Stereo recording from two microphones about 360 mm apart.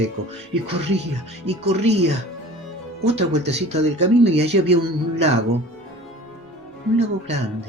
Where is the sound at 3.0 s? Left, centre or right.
Centre.